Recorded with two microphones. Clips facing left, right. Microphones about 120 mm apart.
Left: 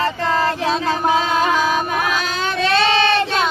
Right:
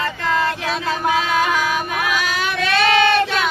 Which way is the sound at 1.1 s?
30° left (ahead or behind).